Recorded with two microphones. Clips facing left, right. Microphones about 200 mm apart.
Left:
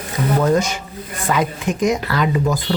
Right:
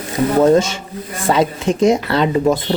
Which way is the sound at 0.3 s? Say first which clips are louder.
Right 5 dB; 25° right (ahead or behind).